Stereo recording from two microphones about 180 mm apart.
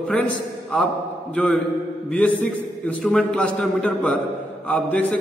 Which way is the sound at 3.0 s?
5° left (ahead or behind).